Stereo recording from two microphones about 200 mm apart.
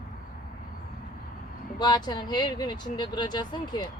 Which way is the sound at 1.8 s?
20° left (ahead or behind).